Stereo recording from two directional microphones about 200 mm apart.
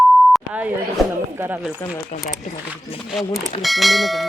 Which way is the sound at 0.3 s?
5° right (ahead or behind).